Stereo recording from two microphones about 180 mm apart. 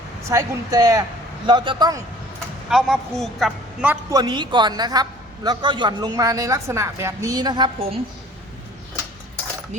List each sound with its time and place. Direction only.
0.3 s a woman's voice: 20° right (ahead or behind)
2.6 s a woman's voice: centre (ahead or behind)
4.1 s a woman's voice: 25° right (ahead or behind)